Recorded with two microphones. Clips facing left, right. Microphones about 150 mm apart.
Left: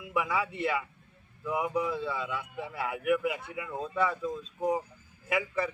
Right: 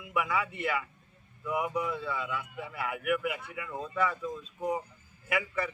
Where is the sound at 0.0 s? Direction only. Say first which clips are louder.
Left 1 dB; 30° left (ahead or behind).